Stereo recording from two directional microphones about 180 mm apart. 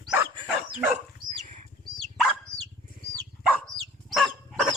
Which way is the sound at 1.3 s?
45° right (ahead or behind).